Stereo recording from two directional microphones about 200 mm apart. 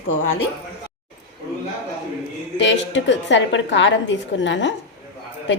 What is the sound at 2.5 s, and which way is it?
A woman's voice, 65° left (ahead or behind).